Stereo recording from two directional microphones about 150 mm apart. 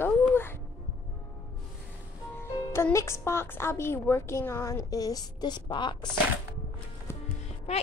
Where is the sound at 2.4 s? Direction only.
15° left (ahead or behind); by 6.1 s 30° left (ahead or behind).